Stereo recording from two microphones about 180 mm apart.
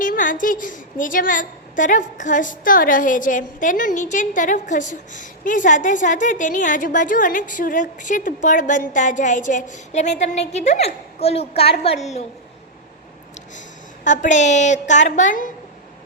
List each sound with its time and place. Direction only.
0.0 s a woman's voice: 50° left (ahead or behind)
14.0 s a woman's voice: 45° left (ahead or behind)